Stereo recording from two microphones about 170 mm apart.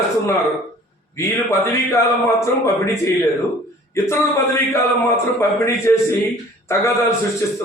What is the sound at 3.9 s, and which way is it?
A man's voice, 15° left (ahead or behind).